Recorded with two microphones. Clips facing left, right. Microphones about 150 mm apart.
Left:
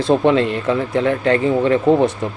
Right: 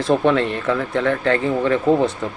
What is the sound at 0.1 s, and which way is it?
Speech, 20° left (ahead or behind).